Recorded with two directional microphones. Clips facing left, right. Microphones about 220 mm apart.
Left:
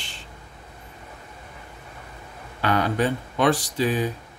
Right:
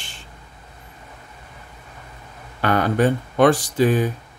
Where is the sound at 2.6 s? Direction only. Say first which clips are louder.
Right 4 dB; 50° right (ahead or behind).